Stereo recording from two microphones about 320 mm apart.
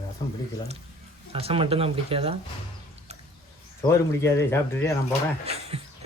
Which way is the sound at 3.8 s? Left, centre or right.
Centre.